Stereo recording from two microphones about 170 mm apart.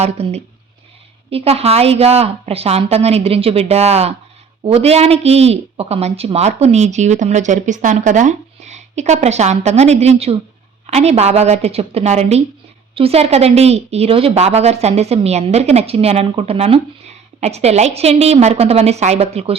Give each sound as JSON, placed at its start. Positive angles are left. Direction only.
{"t": 0.0, "sound": "speech", "side_deg": -40}